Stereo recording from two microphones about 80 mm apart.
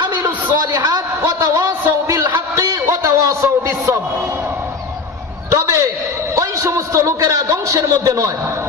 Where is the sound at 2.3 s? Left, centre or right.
Right.